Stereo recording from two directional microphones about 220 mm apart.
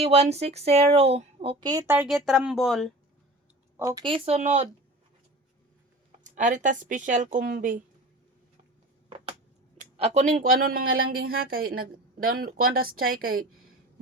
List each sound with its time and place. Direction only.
0.0 s speech: 30° right (ahead or behind)
2.0 s speech: 5° right (ahead or behind)
3.8 s speech: 15° right (ahead or behind)
6.1 s speech: 35° right (ahead or behind)
9.7 s a woman's voice: 35° right (ahead or behind)